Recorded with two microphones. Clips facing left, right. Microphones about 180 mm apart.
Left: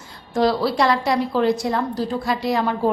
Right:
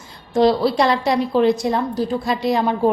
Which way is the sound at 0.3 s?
20° right (ahead or behind).